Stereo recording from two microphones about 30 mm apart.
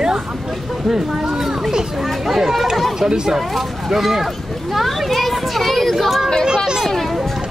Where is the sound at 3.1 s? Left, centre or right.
Right.